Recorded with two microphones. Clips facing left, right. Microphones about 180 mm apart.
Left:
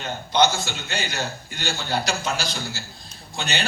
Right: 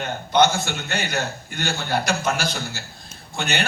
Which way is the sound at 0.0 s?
55° right (ahead or behind).